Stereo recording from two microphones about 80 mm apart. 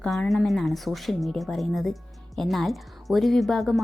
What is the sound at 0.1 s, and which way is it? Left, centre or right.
Speech, centre.